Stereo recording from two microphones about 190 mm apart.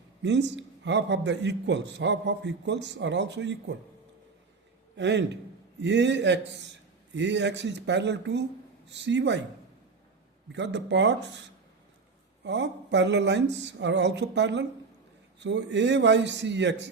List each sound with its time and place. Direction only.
0.2 s a man's voice: 65° right (ahead or behind)
4.9 s a man's voice: 65° right (ahead or behind)
10.5 s a man's voice: 65° right (ahead or behind)